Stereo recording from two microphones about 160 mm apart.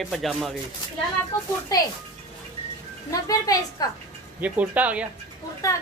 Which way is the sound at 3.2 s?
20° left (ahead or behind).